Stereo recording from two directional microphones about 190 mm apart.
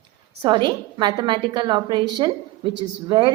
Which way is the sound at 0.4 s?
25° right (ahead or behind).